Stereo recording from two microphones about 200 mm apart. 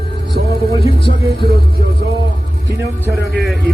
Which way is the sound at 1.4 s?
50° right (ahead or behind).